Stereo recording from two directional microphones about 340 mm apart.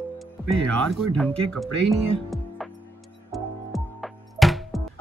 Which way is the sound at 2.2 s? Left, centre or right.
Centre.